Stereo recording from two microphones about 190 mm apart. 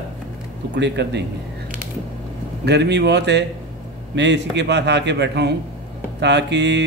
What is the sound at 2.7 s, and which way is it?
Speech, 60° right (ahead or behind).